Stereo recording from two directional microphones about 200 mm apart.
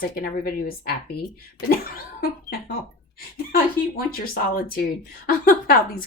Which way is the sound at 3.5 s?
45° left (ahead or behind).